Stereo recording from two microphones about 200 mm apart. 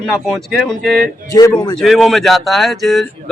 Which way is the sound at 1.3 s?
15° left (ahead or behind).